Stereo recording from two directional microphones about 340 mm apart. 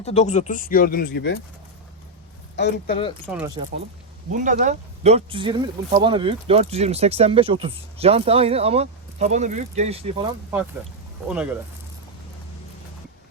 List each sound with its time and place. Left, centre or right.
0.0 s speech: centre
2.6 s speech: left
3.3 s speech: centre
4.3 s speech: right
11.3 s speech: centre